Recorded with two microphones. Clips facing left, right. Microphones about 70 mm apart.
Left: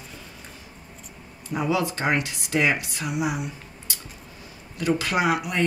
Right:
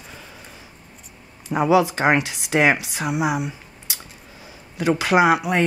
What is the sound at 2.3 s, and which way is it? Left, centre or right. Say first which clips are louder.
Speech: right 5 dB; right.